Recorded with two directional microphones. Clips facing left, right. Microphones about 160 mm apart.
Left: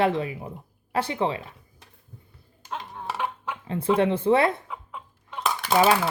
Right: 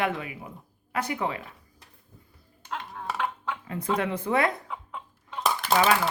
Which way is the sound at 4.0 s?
30° left (ahead or behind).